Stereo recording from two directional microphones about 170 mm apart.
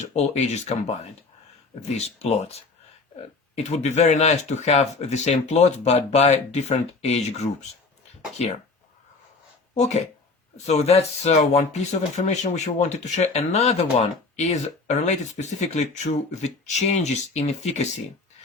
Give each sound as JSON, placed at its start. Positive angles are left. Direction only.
{"t": 0.0, "sound": "speech", "side_deg": 40}
{"t": 2.0, "sound": "speech", "side_deg": 35}
{"t": 9.7, "sound": "speech", "side_deg": 40}